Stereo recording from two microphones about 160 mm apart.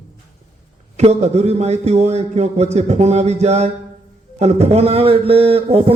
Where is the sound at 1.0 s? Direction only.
45° right (ahead or behind).